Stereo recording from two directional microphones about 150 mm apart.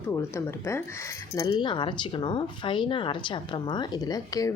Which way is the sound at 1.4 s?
30° left (ahead or behind).